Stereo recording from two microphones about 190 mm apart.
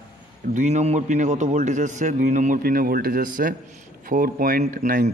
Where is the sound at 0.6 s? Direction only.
35° right (ahead or behind).